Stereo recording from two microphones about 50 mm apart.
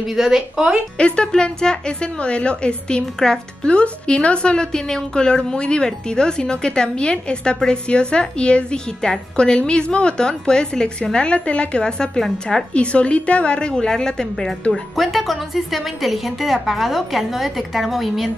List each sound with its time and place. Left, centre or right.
0.1 s speech: centre
0.9 s a woman's voice: centre
12.2 s a woman's voice: centre
12.7 s a woman's voice: left
14.7 s a woman's voice: centre